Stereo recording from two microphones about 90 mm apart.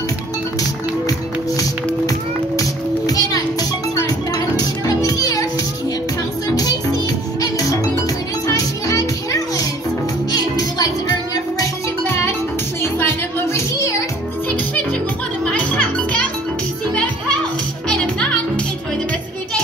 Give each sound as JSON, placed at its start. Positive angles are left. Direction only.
{"t": 1.6, "sound": "music", "side_deg": 40}
{"t": 4.6, "sound": "children playing", "side_deg": 45}
{"t": 6.5, "sound": "music", "side_deg": 45}
{"t": 8.5, "sound": "music", "side_deg": 40}
{"t": 12.1, "sound": "music", "side_deg": 30}
{"t": 15.4, "sound": "music", "side_deg": 15}